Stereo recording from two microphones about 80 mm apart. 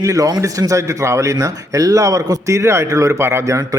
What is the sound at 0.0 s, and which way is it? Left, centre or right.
A man's voice, right.